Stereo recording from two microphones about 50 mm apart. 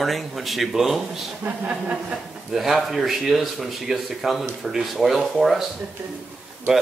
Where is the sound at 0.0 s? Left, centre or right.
Centre.